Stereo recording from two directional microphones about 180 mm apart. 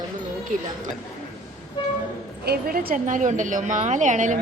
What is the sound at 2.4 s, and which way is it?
A woman's voice, 55° right (ahead or behind).